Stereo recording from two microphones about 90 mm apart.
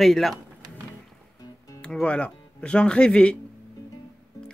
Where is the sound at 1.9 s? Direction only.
10° left (ahead or behind).